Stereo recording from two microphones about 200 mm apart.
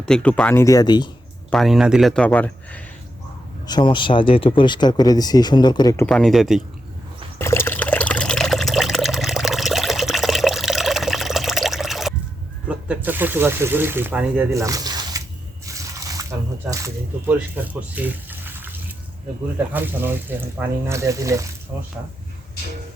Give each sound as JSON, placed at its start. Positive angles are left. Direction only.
{"t": 0.0, "sound": "speech", "side_deg": 5}
{"t": 1.5, "sound": "speech", "side_deg": 0}
{"t": 3.7, "sound": "speech", "side_deg": 25}
{"t": 6.1, "sound": "speech", "side_deg": 0}
{"t": 7.3, "sound": "water", "side_deg": 10}
{"t": 12.6, "sound": "speech", "side_deg": -5}
{"t": 15.6, "sound": "drip", "side_deg": -15}
{"t": 16.6, "sound": "speech", "side_deg": -15}